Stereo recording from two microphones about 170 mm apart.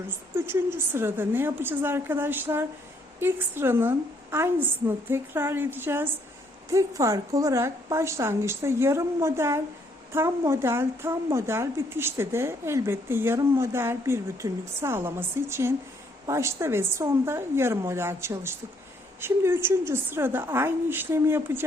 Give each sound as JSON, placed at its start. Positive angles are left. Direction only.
{"t": 0.3, "sound": "speech", "side_deg": -15}